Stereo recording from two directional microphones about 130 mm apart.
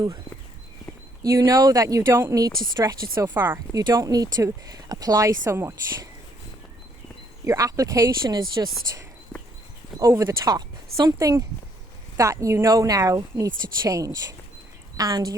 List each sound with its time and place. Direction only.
1.2 s speech: 30° right (ahead or behind)
3.2 s speech: 15° right (ahead or behind)
3.8 s speech: 30° right (ahead or behind)
7.4 s speech: 25° right (ahead or behind)
9.3 s horse: 35° left (ahead or behind)
10.0 s speech: 20° right (ahead or behind)